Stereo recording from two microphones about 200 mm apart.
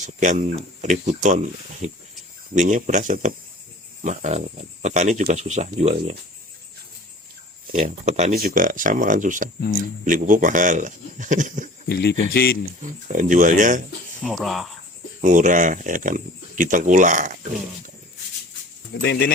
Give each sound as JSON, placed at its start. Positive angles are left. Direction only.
{"t": 0.0, "sound": "speech", "side_deg": -35}
{"t": 7.7, "sound": "speech", "side_deg": -35}
{"t": 11.9, "sound": "speech", "side_deg": 55}
{"t": 12.8, "sound": "speech", "side_deg": -40}
{"t": 14.3, "sound": "speech", "side_deg": 0}
{"t": 15.2, "sound": "speech", "side_deg": -40}
{"t": 19.0, "sound": "speech", "side_deg": 55}